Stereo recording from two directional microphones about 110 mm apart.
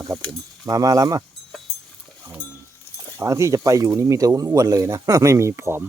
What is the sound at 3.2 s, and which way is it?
Speech, 30° right (ahead or behind).